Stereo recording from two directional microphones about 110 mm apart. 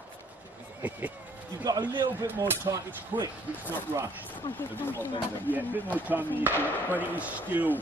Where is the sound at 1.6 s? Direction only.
40° right (ahead or behind).